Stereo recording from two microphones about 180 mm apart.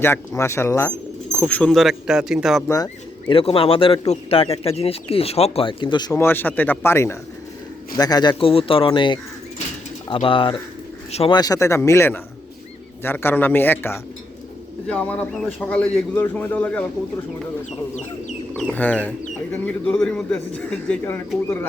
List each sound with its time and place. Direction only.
0.0 s speech: 15° left (ahead or behind); by 2.6 s centre (ahead or behind)
2.6 s speech: 20° left (ahead or behind)
18.5 s speech: 5° left (ahead or behind)